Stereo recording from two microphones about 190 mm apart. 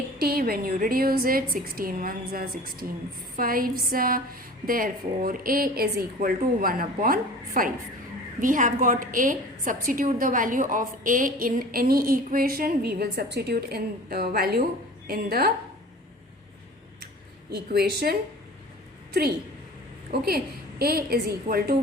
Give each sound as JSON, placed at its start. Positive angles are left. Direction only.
{"t": 0.2, "sound": "a woman's voice", "side_deg": -55}
{"t": 17.5, "sound": "a woman's voice", "side_deg": -55}
{"t": 20.1, "sound": "a woman's voice", "side_deg": -55}